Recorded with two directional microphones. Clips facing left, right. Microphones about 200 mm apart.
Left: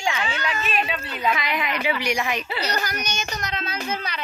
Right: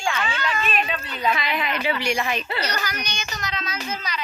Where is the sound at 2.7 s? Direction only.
45° left (ahead or behind).